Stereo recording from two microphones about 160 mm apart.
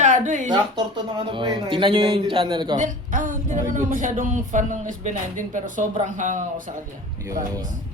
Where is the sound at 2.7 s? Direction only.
55° right (ahead or behind).